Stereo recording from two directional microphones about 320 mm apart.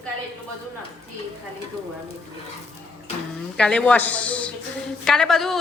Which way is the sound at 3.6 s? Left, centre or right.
Centre.